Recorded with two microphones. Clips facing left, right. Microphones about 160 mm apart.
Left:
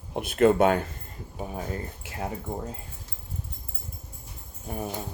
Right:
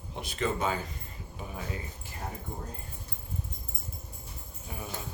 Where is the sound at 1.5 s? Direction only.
45° left (ahead or behind).